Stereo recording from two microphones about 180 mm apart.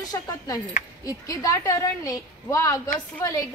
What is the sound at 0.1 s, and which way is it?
A woman's voice, 20° left (ahead or behind).